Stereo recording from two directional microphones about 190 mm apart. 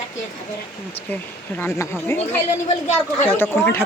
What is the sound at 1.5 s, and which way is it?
Speech, 15° left (ahead or behind).